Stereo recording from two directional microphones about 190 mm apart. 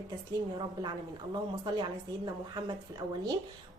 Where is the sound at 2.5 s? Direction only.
20° right (ahead or behind).